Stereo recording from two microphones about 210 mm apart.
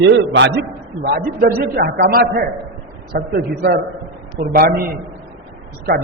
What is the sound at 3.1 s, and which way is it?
Speech, 50° right (ahead or behind).